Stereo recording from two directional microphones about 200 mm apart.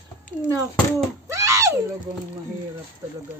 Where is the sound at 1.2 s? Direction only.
15° right (ahead or behind).